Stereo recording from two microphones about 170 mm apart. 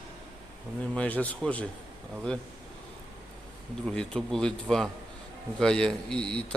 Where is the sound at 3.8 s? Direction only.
5° left (ahead or behind).